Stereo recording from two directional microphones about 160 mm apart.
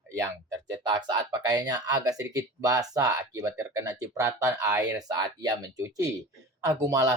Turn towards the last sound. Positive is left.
turn(degrees=-20)  # may be behind; listen again after turning